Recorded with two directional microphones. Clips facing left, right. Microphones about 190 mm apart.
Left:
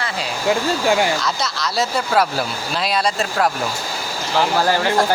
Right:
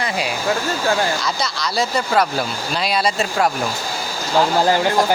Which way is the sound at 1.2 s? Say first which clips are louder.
Even; centre (ahead or behind).